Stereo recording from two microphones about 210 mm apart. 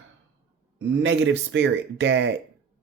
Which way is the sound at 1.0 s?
60° right (ahead or behind).